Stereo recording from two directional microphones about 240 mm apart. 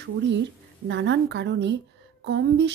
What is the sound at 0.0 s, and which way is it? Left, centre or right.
Speech, right.